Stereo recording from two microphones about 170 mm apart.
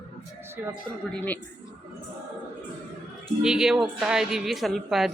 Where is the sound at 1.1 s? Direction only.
10° left (ahead or behind).